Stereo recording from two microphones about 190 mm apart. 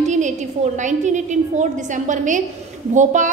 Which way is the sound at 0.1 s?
40° right (ahead or behind).